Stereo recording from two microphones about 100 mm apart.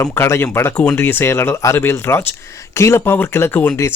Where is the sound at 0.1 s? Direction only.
25° left (ahead or behind).